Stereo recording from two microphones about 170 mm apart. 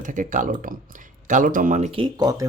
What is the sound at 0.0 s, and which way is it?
Speech, 50° right (ahead or behind).